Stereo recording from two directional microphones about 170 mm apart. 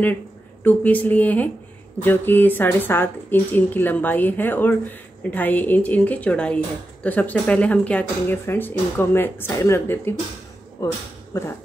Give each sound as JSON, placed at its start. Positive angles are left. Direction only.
{"t": 0.7, "sound": "a woman's voice", "side_deg": 10}